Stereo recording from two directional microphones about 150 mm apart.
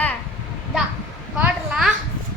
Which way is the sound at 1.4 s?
Centre (ahead or behind).